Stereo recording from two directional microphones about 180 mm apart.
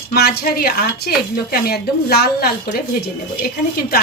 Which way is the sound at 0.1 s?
60° left (ahead or behind).